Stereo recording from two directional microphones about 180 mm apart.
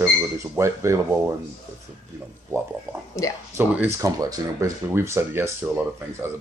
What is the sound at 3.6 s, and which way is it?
Speech, 10° right (ahead or behind).